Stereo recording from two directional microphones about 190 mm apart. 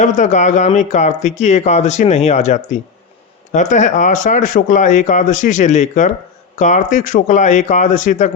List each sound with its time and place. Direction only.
0.0 s speech: 40° left (ahead or behind)